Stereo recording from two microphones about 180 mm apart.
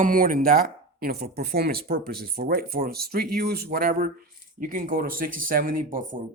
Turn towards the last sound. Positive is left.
turn(degrees=-50)  # may be behind; listen again after turning